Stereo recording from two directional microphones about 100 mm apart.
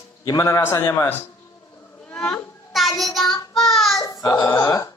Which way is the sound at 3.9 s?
35° left (ahead or behind).